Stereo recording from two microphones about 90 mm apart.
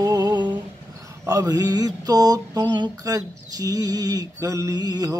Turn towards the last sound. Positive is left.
turn(degrees=-45)  # may be behind; listen again after turning